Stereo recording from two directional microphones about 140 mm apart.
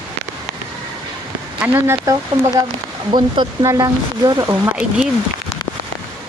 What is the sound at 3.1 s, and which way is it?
Speech, 35° right (ahead or behind).